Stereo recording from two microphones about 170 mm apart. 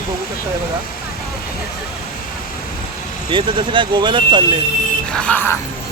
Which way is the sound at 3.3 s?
30° right (ahead or behind).